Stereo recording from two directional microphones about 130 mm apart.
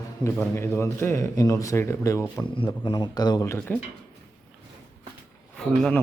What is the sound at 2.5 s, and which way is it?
A man's voice, 35° left (ahead or behind).